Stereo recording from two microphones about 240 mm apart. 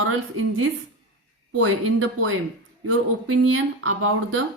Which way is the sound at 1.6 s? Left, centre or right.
Right.